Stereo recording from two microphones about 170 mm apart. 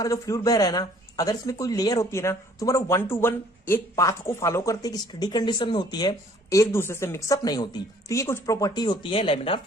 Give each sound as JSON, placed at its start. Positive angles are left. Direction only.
{"t": 0.0, "sound": "speech", "side_deg": 20}